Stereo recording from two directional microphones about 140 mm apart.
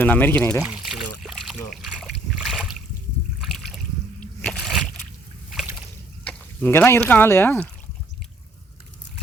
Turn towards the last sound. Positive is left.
turn(degrees=15)  # may be behind; listen again after turning